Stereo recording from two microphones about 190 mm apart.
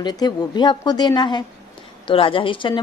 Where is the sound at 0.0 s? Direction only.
20° left (ahead or behind).